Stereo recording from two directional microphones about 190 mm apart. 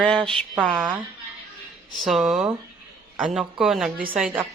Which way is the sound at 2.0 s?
Centre (ahead or behind).